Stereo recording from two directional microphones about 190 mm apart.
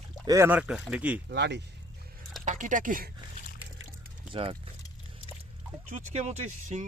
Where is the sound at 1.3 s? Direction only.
65° right (ahead or behind).